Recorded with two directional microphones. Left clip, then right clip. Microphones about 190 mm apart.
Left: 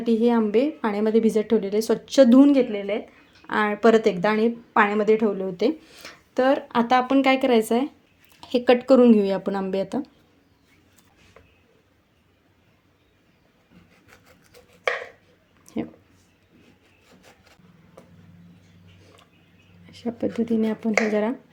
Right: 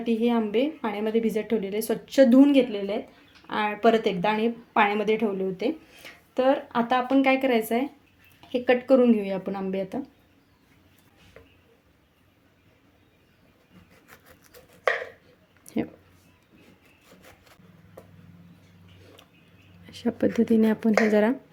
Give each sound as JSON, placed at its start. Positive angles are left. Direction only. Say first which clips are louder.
{"t": 0.0, "sound": "speech", "louder": "left 4 dB", "side_deg": 20}
{"t": 3.4, "sound": "speech", "louder": "left 3 dB", "side_deg": 25}
{"t": 14.1, "sound": "chopping", "louder": "right 1 dB", "side_deg": -5}
{"t": 15.6, "sound": "a sound", "louder": "right 1 dB", "side_deg": -10}
{"t": 19.8, "sound": "speech", "louder": "right 2 dB", "side_deg": -15}